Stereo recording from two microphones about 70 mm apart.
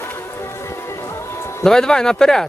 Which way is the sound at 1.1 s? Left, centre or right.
Left.